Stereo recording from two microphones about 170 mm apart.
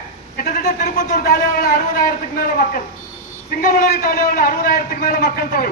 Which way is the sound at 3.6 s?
55° left (ahead or behind).